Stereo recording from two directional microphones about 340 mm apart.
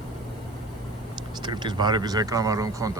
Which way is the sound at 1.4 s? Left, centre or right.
Centre.